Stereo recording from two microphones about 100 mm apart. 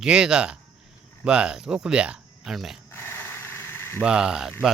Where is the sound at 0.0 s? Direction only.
10° right (ahead or behind).